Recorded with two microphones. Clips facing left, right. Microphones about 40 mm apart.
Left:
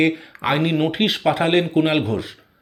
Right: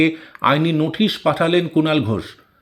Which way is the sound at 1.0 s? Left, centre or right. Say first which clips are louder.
Right 1 dB; left.